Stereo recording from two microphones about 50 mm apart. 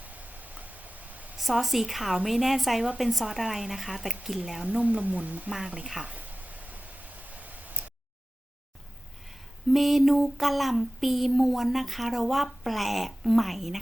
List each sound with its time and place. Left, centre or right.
0.0 s a sound: right
1.4 s speech: centre
4.6 s speech: right
5.5 s a woman's voice: centre
6.0 s a sound: right
9.2 s speech: centre